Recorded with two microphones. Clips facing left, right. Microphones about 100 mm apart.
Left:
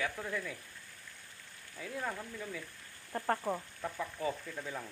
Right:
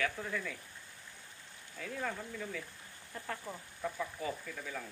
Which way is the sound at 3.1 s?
45° left (ahead or behind).